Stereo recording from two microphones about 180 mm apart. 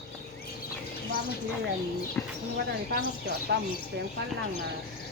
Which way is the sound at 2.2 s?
10° left (ahead or behind).